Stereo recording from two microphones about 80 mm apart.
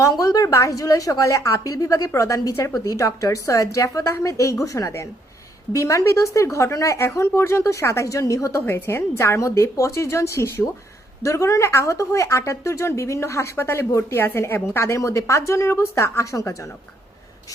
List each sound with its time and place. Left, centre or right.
0.0 s a woman's voice: left
8.6 s speech: left